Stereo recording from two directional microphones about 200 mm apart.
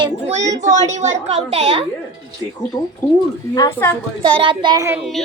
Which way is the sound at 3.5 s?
15° left (ahead or behind).